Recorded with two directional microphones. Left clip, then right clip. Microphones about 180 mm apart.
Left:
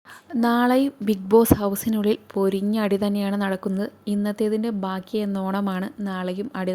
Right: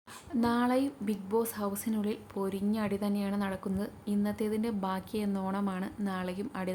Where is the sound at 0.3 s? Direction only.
35° left (ahead or behind).